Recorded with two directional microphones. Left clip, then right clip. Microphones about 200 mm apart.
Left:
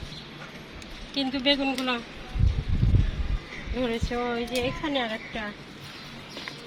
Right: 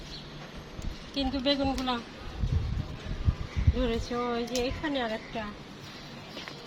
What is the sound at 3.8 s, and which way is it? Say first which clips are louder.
Speech: left 2 dB; 15° right (ahead or behind).